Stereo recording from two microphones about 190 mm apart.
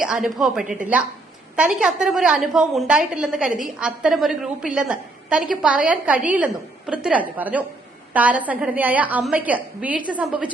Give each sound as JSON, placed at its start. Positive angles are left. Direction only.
{"t": 0.0, "sound": "a woman's voice", "side_deg": -5}
{"t": 0.6, "sound": "a woman's voice", "side_deg": -45}
{"t": 1.5, "sound": "a woman's voice", "side_deg": -5}